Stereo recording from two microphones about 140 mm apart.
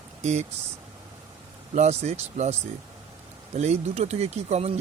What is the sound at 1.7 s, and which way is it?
Speech, 55° right (ahead or behind).